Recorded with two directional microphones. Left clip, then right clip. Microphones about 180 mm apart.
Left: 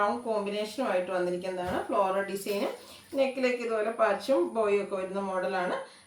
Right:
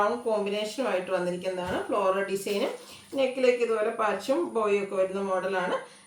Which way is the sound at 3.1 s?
10° right (ahead or behind).